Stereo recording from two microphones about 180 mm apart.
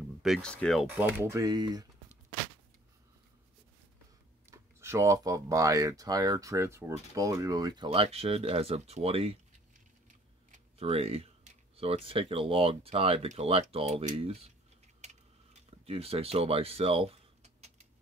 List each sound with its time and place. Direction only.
0.2 s speech: centre (ahead or behind)
1.3 s speech: 20° right (ahead or behind)
4.5 s speech: 15° right (ahead or behind); by 14.5 s 35° right (ahead or behind)
15.8 s speech: 35° right (ahead or behind)